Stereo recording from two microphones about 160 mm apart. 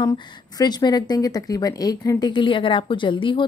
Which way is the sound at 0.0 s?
25° left (ahead or behind).